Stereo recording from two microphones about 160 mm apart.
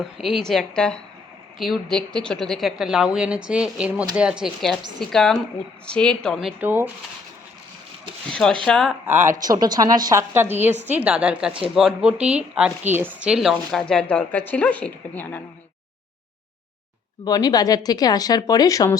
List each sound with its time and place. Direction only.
0.0 s a woman's voice: centre (ahead or behind)
6.6 s a woman's voice: 10° right (ahead or behind)
8.3 s a woman's voice: 5° left (ahead or behind)
9.0 s a woman's voice: 15° right (ahead or behind); by 15.4 s 10° left (ahead or behind)
17.2 s speech: 25° left (ahead or behind)